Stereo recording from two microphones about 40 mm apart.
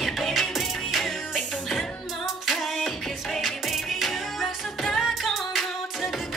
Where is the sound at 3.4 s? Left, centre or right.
Centre.